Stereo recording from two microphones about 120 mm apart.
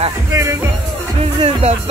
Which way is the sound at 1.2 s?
55° right (ahead or behind).